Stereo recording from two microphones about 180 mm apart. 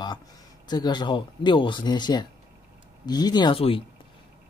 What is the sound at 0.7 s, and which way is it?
Speech, 25° left (ahead or behind).